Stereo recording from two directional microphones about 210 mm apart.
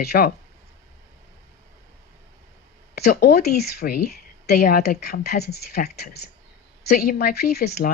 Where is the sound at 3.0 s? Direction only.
50° left (ahead or behind).